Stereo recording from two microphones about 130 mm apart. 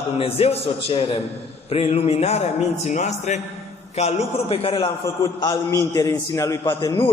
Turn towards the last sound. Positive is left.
turn(degrees=35)  # may be behind; listen again after turning